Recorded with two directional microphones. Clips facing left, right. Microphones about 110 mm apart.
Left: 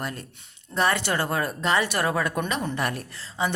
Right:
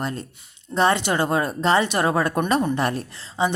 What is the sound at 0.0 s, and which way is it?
A woman's voice, 25° right (ahead or behind).